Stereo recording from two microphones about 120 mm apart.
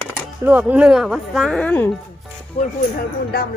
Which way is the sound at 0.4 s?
15° right (ahead or behind).